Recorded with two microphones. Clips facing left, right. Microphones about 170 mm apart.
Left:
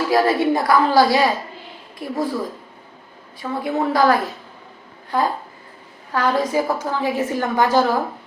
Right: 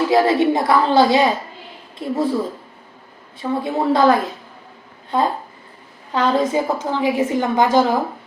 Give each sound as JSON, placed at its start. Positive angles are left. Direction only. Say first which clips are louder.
{"t": 0.1, "sound": "a woman's voice", "louder": "even", "side_deg": -20}
{"t": 3.6, "sound": "a woman's voice", "louder": "right 1 dB", "side_deg": -25}